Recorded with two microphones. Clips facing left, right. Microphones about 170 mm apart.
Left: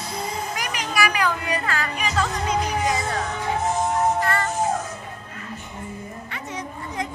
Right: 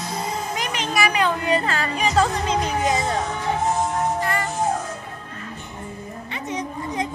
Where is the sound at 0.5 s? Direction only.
25° right (ahead or behind).